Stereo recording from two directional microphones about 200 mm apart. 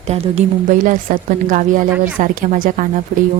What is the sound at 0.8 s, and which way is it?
Speech, 40° right (ahead or behind).